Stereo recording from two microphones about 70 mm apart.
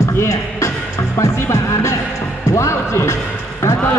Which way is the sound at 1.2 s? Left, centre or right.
Left.